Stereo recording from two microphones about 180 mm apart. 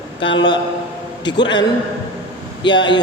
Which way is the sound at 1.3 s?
25° left (ahead or behind).